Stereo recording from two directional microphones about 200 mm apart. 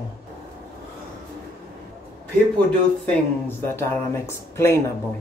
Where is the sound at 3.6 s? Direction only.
10° left (ahead or behind).